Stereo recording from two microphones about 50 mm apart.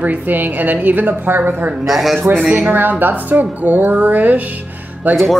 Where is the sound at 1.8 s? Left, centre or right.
Centre.